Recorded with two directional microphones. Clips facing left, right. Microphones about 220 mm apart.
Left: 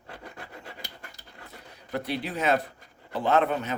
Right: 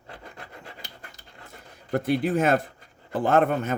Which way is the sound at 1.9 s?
50° right (ahead or behind).